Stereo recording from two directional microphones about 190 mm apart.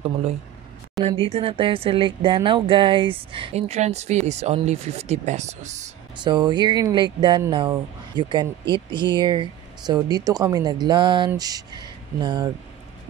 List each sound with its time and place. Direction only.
1.0 s speech: 30° right (ahead or behind)
6.2 s speech: 25° right (ahead or behind)